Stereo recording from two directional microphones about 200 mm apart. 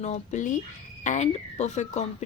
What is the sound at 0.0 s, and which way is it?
A woman's voice, 35° left (ahead or behind).